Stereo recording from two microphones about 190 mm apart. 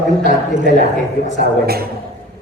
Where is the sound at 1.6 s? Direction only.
55° right (ahead or behind).